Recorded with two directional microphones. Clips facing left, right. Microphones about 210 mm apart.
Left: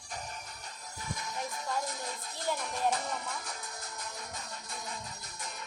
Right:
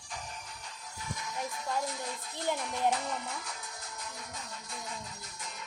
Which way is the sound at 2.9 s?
40° left (ahead or behind).